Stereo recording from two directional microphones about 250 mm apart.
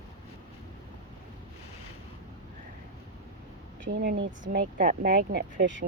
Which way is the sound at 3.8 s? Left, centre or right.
Right.